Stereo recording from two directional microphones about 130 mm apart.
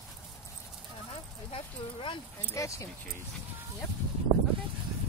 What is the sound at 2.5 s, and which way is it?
Speech, 25° left (ahead or behind).